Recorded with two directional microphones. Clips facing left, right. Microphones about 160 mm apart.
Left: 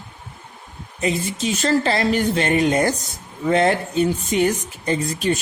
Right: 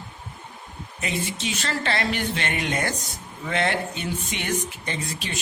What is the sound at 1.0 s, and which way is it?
Speech, 40° left (ahead or behind).